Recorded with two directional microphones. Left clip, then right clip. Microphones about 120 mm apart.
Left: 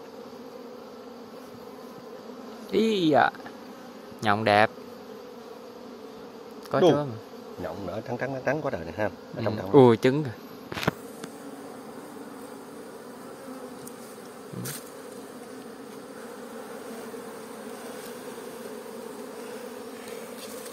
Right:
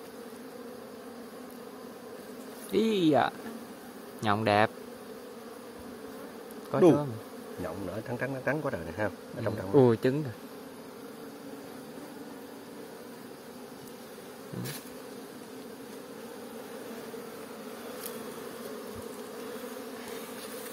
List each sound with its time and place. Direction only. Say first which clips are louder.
2.7 s speech: left 3 dB; 10° left (ahead or behind)
6.7 s speech: left 2 dB; 20° left (ahead or behind)
7.6 s speech: left 3 dB; 30° left (ahead or behind)